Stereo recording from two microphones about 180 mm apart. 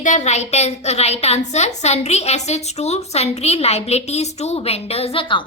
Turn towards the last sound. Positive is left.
turn(degrees=30)  # may be behind; listen again after turning